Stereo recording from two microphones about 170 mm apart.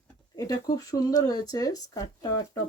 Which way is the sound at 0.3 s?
20° left (ahead or behind).